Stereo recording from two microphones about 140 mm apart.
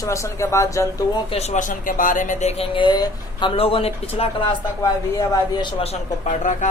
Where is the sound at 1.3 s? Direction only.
50° left (ahead or behind); by 2.5 s 70° left (ahead or behind).